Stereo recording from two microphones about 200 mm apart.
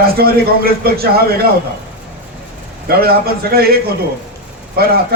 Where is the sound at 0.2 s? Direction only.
50° right (ahead or behind).